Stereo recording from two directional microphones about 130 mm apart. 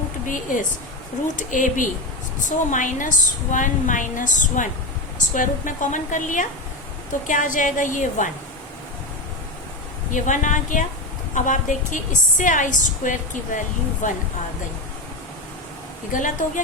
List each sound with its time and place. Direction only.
0.3 s a woman's voice: 90° left
10.1 s a woman's voice: 75° left (ahead or behind)